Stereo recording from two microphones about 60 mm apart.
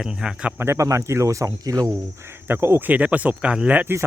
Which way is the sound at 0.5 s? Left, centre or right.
Right.